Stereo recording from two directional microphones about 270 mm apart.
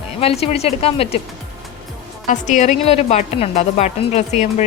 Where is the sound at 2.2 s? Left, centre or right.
Left.